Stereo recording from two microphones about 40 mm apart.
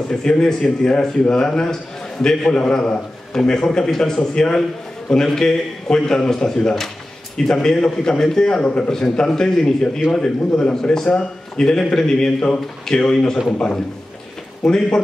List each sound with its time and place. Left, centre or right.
0.1 s a man's voice: centre
14.6 s a man's voice: centre